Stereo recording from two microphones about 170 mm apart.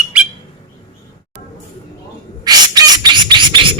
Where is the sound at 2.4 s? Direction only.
25° right (ahead or behind).